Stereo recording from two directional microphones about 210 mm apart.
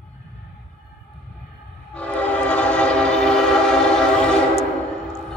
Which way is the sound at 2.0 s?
5° left (ahead or behind).